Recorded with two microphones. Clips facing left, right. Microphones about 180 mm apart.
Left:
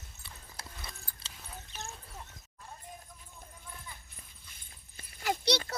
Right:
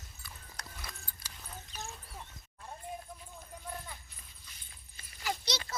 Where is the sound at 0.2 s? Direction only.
25° left (ahead or behind).